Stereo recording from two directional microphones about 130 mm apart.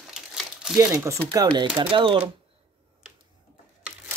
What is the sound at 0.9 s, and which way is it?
Speech, 20° right (ahead or behind).